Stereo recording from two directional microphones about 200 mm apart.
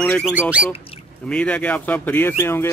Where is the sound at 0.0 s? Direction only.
5° left (ahead or behind).